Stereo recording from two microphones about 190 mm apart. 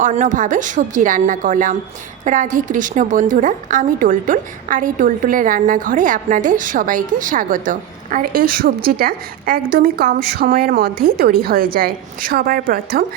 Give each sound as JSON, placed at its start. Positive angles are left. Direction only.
{"t": 0.0, "sound": "a woman's voice", "side_deg": -40}